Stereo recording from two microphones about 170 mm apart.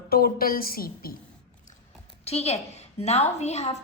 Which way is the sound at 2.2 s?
35° left (ahead or behind).